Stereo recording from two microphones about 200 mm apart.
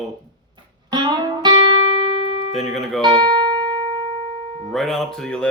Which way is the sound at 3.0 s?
20° right (ahead or behind).